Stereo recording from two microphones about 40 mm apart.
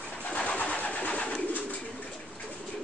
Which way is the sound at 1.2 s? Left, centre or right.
Left.